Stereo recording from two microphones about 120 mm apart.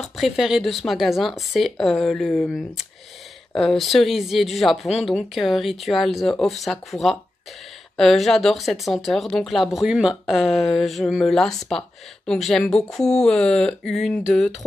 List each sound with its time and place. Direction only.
0.0 s speech: centre (ahead or behind)